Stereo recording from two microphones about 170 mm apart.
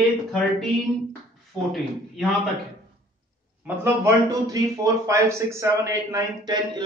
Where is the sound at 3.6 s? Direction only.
20° right (ahead or behind).